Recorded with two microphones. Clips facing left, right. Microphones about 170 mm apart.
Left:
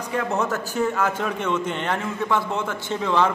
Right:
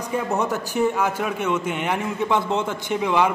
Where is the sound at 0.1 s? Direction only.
15° right (ahead or behind).